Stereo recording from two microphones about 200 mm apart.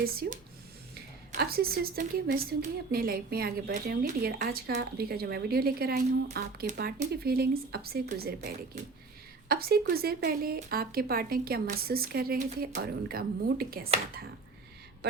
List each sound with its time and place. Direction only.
0.0 s a woman's voice: 50° right (ahead or behind)
9.5 s a woman's voice: 50° right (ahead or behind)